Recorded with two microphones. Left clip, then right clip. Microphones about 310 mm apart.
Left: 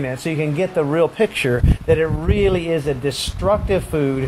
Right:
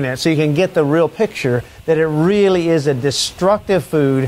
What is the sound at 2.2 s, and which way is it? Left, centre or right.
Speech, right.